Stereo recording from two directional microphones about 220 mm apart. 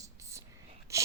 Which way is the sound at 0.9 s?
15° right (ahead or behind).